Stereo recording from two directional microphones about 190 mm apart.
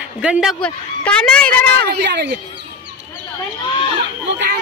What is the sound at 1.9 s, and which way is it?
Speech, 65° right (ahead or behind).